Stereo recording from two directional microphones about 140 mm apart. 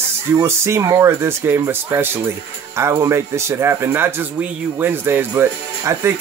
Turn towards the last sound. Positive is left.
turn(degrees=-15)  # may be behind; listen again after turning